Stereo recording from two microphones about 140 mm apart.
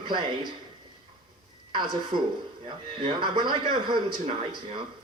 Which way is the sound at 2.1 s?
35° right (ahead or behind).